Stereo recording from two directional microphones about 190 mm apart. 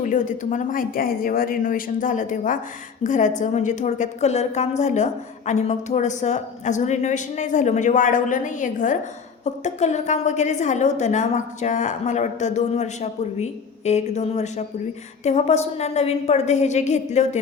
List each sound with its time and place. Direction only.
0.0 s a woman's voice: 40° left (ahead or behind)